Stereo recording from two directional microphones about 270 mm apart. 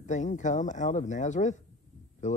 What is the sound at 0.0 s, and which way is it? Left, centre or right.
Speech, left.